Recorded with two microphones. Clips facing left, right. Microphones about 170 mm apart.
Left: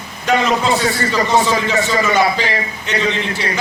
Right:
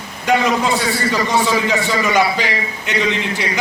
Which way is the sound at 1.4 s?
15° right (ahead or behind).